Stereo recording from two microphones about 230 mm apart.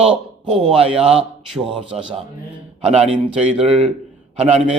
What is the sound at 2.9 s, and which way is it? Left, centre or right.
Speech, right.